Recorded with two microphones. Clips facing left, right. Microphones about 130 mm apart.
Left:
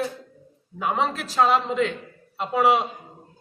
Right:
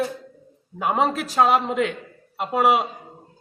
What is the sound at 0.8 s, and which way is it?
Speech, 55° right (ahead or behind).